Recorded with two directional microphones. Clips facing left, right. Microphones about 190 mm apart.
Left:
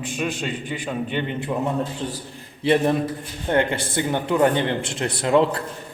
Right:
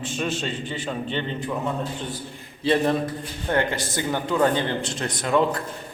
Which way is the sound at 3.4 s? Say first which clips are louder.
Left 3 dB; 20° left (ahead or behind).